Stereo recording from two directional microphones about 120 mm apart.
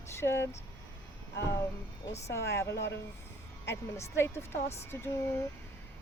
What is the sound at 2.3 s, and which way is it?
Speech, 25° left (ahead or behind).